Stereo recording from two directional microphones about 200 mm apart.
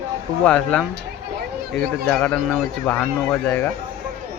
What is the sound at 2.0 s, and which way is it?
Speech, 10° left (ahead or behind).